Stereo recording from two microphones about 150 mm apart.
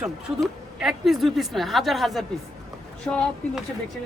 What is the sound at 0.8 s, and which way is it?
Speech, 5° right (ahead or behind).